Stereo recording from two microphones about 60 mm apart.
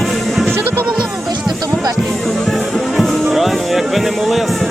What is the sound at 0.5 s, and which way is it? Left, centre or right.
Music, right.